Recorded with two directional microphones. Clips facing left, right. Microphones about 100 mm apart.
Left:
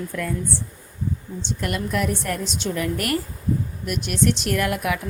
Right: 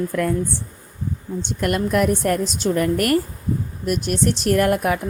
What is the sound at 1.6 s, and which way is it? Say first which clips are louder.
A woman's voice: right 6 dB; 50° right (ahead or behind).